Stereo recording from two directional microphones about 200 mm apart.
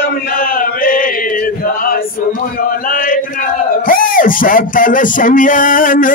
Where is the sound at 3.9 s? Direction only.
45° left (ahead or behind).